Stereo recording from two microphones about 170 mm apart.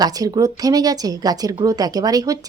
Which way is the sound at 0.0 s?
20° right (ahead or behind).